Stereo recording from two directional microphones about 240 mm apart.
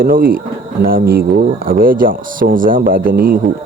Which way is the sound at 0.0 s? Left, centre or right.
Right.